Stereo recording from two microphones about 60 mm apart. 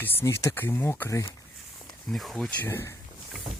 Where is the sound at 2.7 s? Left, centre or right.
Left.